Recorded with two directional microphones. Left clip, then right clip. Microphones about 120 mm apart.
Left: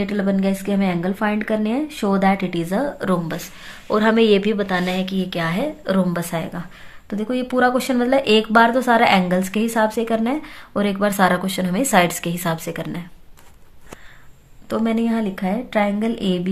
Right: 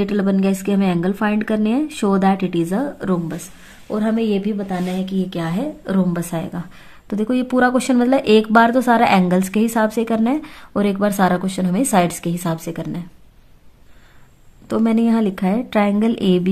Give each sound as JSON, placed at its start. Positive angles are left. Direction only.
{"t": 0.0, "sound": "a woman's voice", "side_deg": -40}
{"t": 3.9, "sound": "speech", "side_deg": 0}
{"t": 4.6, "sound": "a woman's voice", "side_deg": -15}
{"t": 4.9, "sound": "a woman's voice", "side_deg": -35}
{"t": 5.4, "sound": "a woman's voice", "side_deg": -55}
{"t": 7.1, "sound": "speech", "side_deg": -85}
{"t": 14.7, "sound": "speech", "side_deg": -90}